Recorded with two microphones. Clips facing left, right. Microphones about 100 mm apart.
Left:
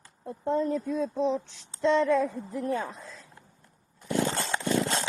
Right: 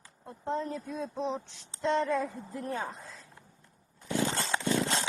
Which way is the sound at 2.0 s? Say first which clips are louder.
Left 6 dB; 90° left.